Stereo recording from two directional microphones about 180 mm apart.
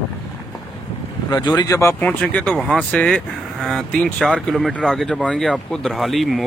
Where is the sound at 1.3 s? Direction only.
20° left (ahead or behind).